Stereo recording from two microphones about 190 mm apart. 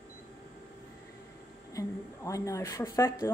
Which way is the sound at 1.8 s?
15° left (ahead or behind).